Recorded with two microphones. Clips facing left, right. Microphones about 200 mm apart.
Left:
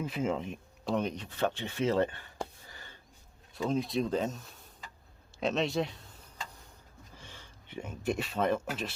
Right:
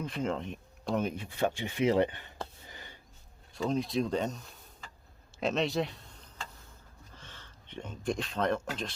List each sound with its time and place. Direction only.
0.0 s speech: 5° left (ahead or behind); by 2.3 s 15° right (ahead or behind)
2.6 s a sound: 15° right (ahead or behind)
3.5 s speech: centre (ahead or behind)
7.1 s speech: 10° left (ahead or behind)